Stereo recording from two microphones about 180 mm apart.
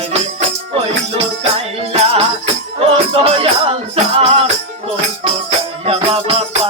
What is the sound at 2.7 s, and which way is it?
Music, 30° right (ahead or behind).